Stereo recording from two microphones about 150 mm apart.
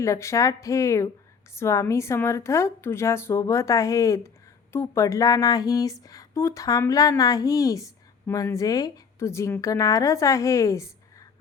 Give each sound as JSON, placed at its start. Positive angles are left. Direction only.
{"t": 0.0, "sound": "speech", "side_deg": 20}